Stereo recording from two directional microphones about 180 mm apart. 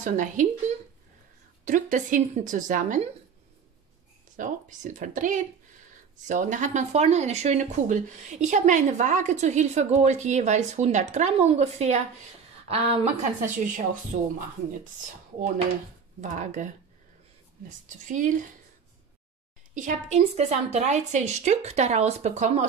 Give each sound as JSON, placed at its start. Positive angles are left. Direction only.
{"t": 0.0, "sound": "a woman's voice", "side_deg": -45}
{"t": 4.4, "sound": "a woman's voice", "side_deg": -45}
{"t": 16.2, "sound": "a woman's voice", "side_deg": -40}
{"t": 19.7, "sound": "speech", "side_deg": -45}